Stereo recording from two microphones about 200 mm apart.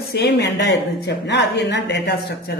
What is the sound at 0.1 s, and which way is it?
Speech, 55° left (ahead or behind).